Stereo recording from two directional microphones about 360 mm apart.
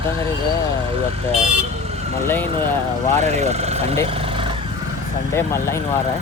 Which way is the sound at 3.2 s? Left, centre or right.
Centre.